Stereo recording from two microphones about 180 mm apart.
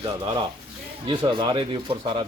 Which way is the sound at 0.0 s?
25° right (ahead or behind).